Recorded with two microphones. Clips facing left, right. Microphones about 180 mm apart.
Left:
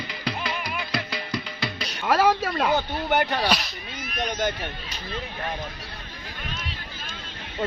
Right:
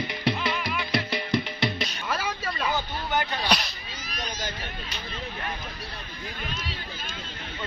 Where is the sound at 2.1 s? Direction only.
65° left (ahead or behind).